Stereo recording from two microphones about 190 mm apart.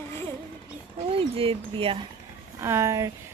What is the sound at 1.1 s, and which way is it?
Speech, 30° right (ahead or behind).